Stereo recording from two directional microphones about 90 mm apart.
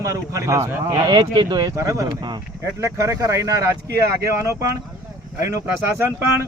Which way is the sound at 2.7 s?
35° right (ahead or behind).